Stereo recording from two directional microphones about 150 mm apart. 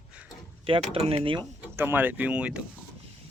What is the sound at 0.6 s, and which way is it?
Speech, 40° right (ahead or behind).